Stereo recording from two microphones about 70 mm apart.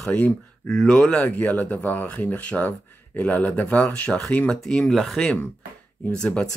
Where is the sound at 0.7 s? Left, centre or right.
Centre.